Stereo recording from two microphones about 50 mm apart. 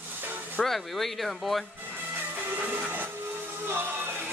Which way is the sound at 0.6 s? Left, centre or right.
Centre.